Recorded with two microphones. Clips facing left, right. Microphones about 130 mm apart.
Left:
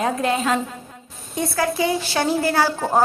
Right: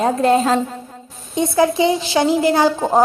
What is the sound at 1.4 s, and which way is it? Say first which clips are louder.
A woman's voice: right 6 dB; 20° right (ahead or behind).